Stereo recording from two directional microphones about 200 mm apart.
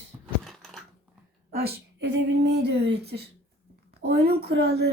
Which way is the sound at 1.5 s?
55° right (ahead or behind).